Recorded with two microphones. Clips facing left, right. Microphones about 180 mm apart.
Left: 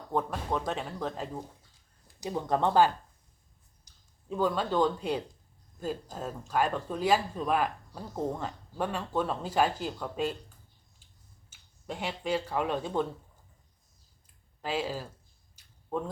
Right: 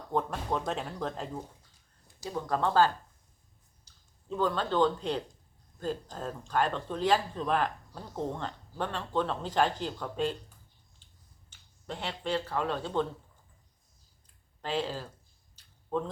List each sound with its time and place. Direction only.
0.1 s speech: centre (ahead or behind)
2.2 s speech: 20° left (ahead or behind)
4.3 s speech: 10° left (ahead or behind)
11.5 s speech: 10° left (ahead or behind)
14.6 s speech: 10° left (ahead or behind)
15.5 s a sound: 10° left (ahead or behind)